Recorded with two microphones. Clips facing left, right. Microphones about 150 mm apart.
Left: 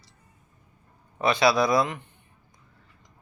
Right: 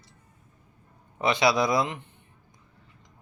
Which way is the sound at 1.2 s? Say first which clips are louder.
Left 2 dB; 20° right (ahead or behind).